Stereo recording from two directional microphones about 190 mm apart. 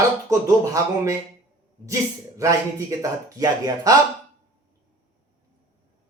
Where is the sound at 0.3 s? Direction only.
15° right (ahead or behind).